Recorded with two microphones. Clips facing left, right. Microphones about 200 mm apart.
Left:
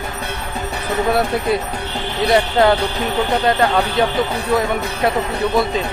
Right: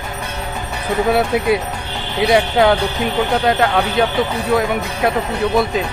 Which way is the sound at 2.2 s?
Centre (ahead or behind).